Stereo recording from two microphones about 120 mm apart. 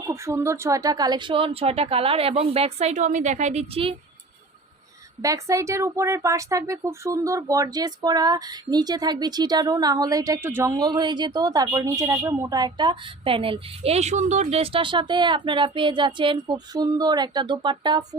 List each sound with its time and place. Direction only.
0.1 s speech: 25° right (ahead or behind); by 3.8 s 65° right (ahead or behind)
5.2 s speech: 25° right (ahead or behind)
10.8 s a woman's voice: 35° right (ahead or behind)